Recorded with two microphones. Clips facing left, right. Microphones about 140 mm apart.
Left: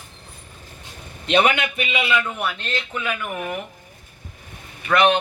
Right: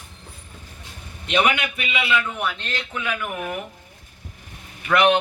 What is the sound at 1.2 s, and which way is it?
A man's voice, 30° left (ahead or behind).